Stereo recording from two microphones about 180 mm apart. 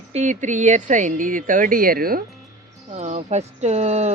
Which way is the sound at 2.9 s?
40° right (ahead or behind).